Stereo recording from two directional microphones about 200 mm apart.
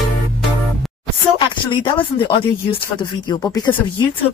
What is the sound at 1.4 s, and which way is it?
Speech, 25° left (ahead or behind).